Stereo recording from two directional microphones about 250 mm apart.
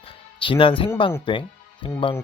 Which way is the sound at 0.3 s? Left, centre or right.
Centre.